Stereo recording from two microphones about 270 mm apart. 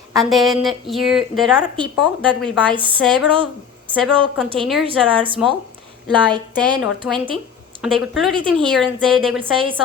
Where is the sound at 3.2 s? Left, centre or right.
Centre.